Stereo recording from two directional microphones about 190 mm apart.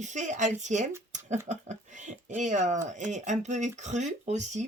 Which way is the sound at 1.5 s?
40° right (ahead or behind).